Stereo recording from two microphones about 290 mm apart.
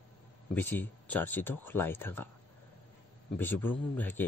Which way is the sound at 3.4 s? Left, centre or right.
Centre.